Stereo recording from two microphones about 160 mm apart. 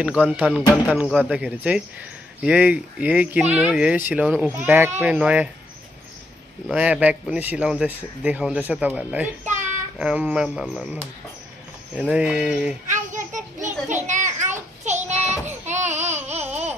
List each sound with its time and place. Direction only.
0.0 s speech: 5° right (ahead or behind)
6.7 s speech: 10° right (ahead or behind)
12.0 s speech: 5° right (ahead or behind)
12.8 s a sound: 50° right (ahead or behind)
15.0 s child singing: 45° right (ahead or behind)
15.6 s baby cry: 45° right (ahead or behind)